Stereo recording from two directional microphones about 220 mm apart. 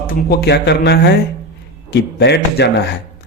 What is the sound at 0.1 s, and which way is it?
Speech, 45° left (ahead or behind).